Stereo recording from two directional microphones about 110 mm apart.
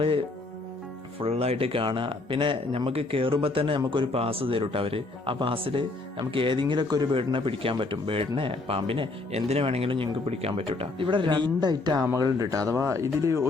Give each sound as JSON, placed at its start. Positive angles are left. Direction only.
{"t": 0.0, "sound": "speech", "side_deg": -55}
{"t": 7.3, "sound": "speech", "side_deg": -50}